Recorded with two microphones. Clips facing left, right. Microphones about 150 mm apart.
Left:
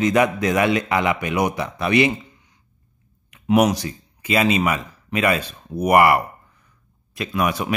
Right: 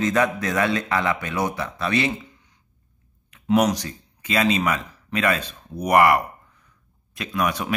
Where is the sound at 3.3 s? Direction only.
10° left (ahead or behind).